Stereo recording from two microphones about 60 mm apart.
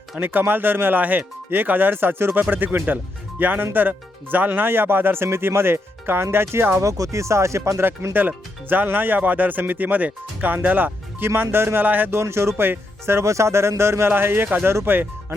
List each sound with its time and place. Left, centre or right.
0.2 s speech: right
6.7 s speech: right
8.7 s speech: right
12.1 s speech: right
14.1 s speech: right